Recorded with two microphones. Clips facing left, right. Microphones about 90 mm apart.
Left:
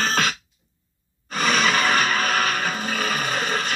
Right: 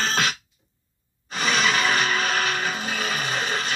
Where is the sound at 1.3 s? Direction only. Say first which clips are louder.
Left 2 dB; 45° left (ahead or behind).